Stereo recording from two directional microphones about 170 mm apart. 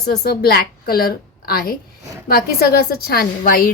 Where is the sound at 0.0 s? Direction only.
70° left (ahead or behind).